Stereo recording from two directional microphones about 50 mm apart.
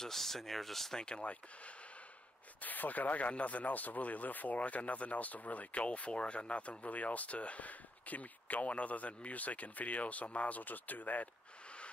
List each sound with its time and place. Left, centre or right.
0.0 s speech: centre
0.9 s speech: centre; by 11.2 s left